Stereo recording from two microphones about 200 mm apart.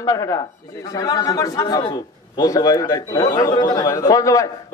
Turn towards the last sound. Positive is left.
turn(degrees=15)  # may be behind; listen again after turning